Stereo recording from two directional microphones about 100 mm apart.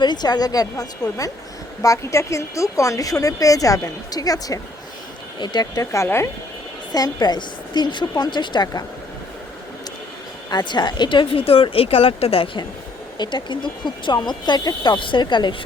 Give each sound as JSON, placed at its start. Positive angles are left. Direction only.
{"t": 0.0, "sound": "speech", "side_deg": 45}
{"t": 6.9, "sound": "speech", "side_deg": 40}
{"t": 10.5, "sound": "speech", "side_deg": 45}
{"t": 13.1, "sound": "speech", "side_deg": 50}